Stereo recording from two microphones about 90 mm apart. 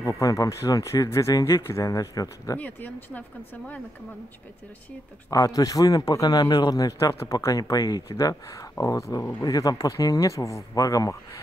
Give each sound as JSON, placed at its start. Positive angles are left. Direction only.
{"t": 0.0, "sound": "speech", "side_deg": 40}
{"t": 2.5, "sound": "speech", "side_deg": 20}
{"t": 5.3, "sound": "speech", "side_deg": 40}